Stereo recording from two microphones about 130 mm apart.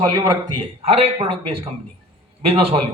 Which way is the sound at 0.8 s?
55° right (ahead or behind).